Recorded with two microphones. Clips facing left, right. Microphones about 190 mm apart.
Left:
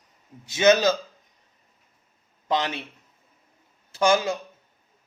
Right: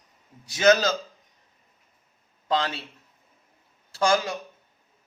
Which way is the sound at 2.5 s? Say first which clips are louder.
Even; 20° left (ahead or behind).